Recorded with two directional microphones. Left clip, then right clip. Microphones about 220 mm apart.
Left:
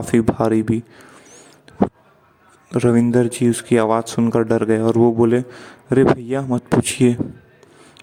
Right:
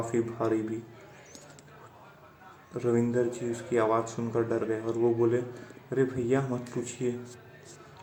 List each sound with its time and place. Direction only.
0.1 s speech: 50° left (ahead or behind)
2.7 s speech: 45° left (ahead or behind)